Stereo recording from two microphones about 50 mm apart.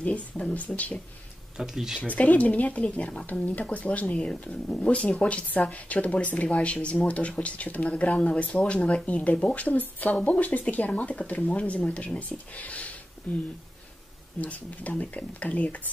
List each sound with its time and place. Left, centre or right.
0.0 s speech: left
1.6 s speech: centre
2.0 s speech: left